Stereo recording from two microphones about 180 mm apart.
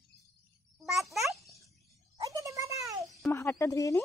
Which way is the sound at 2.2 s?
20° right (ahead or behind).